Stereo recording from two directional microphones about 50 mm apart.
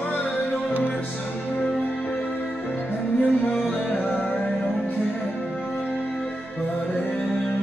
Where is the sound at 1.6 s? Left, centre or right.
Left.